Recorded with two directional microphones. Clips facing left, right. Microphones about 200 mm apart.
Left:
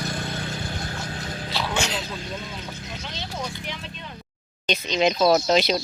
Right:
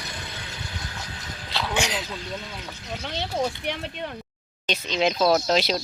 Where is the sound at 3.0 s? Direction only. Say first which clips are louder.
Right 8 dB; 60° right (ahead or behind).